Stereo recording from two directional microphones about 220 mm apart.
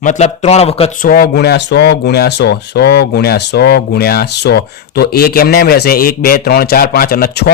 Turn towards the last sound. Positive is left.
turn(degrees=45)  # may be behind; listen again after turning